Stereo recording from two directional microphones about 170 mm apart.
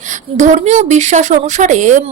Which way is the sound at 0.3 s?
45° right (ahead or behind).